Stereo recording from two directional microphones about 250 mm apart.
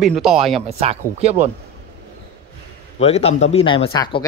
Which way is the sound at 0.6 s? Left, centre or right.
Right.